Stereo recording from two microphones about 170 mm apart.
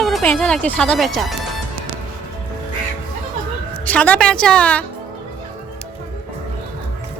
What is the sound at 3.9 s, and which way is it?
Speech, 10° left (ahead or behind).